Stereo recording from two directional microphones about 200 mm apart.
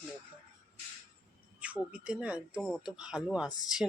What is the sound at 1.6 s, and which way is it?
Speech, 5° right (ahead or behind).